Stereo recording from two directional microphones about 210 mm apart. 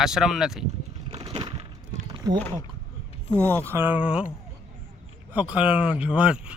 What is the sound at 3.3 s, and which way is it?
Speech, 10° right (ahead or behind).